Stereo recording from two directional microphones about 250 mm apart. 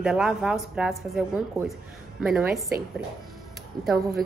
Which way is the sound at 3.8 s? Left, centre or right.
Centre.